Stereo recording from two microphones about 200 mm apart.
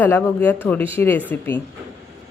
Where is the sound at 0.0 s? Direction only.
10° left (ahead or behind).